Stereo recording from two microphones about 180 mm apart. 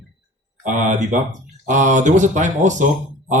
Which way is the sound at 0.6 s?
45° right (ahead or behind).